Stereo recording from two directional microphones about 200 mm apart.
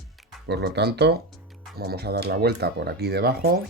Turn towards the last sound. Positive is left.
turn(degrees=-55)  # may be behind; listen again after turning